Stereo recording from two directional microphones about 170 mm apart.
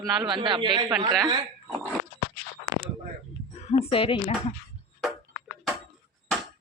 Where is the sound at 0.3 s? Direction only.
30° right (ahead or behind).